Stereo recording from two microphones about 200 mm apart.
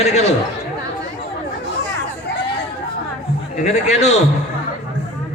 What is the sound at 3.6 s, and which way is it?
Speech, 35° left (ahead or behind).